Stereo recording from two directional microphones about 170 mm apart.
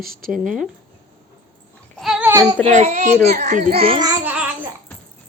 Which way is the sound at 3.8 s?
35° right (ahead or behind).